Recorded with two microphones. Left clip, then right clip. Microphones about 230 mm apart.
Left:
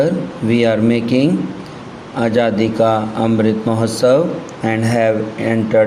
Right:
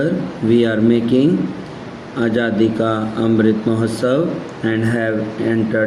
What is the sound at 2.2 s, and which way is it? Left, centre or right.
A man's voice, left.